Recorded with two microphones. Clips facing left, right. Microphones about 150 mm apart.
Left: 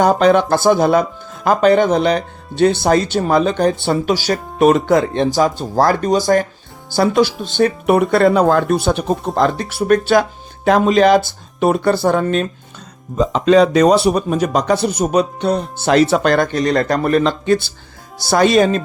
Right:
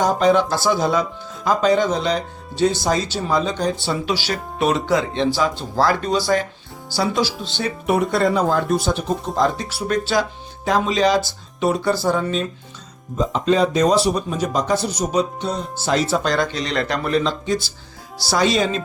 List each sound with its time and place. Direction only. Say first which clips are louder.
0.0 s speech: left 4 dB; 65° left (ahead or behind)
13.1 s speech: left 6 dB; 85° left; by 18.8 s 55° left (ahead or behind)